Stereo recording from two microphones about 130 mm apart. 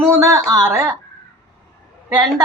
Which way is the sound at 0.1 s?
20° right (ahead or behind).